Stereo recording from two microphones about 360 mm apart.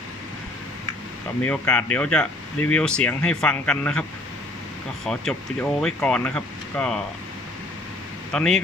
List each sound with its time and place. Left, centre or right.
1.5 s speech: centre
5.0 s speech: centre
8.3 s speech: centre